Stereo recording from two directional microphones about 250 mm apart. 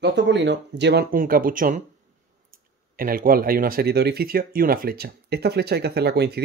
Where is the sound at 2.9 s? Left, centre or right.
Right.